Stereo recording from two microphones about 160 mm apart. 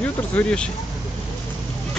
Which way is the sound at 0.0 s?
10° left (ahead or behind).